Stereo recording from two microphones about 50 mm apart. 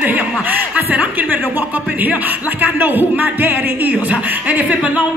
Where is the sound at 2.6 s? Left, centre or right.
Right.